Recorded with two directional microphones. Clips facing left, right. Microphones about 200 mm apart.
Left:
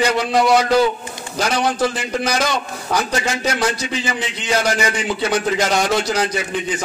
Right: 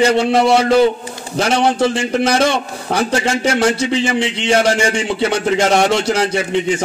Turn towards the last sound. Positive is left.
turn(degrees=-25)  # may be behind; listen again after turning